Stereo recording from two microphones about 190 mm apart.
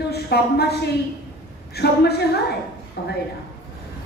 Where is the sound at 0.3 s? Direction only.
60° left (ahead or behind).